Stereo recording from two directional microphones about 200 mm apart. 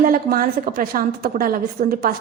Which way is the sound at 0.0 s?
45° right (ahead or behind).